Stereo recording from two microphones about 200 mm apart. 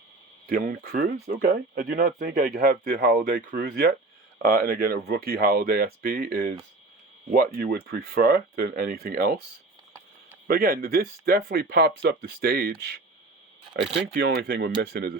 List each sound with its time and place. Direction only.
0.4 s speech: 45° right (ahead or behind)
10.5 s speech: 45° right (ahead or behind)